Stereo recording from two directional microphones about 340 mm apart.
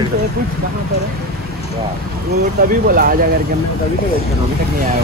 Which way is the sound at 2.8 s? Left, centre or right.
Right.